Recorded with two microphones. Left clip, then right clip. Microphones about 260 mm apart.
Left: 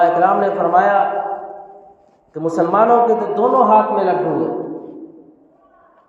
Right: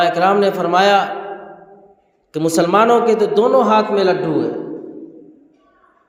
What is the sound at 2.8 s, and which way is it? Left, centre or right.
A man's voice, right.